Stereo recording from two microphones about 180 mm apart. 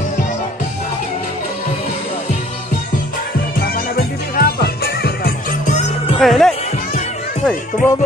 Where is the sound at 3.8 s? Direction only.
55° left (ahead or behind).